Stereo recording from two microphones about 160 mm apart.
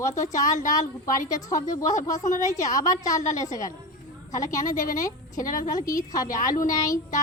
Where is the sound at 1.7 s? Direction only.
20° left (ahead or behind).